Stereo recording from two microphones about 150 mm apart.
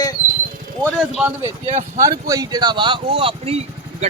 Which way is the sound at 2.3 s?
25° right (ahead or behind).